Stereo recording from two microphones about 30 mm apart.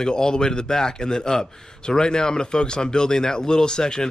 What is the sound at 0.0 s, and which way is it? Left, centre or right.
A man's voice, left.